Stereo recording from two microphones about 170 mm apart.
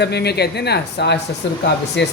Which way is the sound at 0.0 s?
80° left.